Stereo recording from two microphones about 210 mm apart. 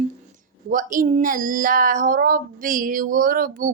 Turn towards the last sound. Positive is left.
turn(degrees=-40)  # may be behind; listen again after turning